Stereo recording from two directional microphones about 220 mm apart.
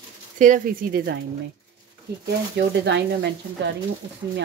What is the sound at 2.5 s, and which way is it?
Speech, 50° right (ahead or behind).